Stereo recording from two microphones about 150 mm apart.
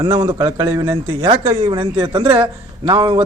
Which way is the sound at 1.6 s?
35° right (ahead or behind).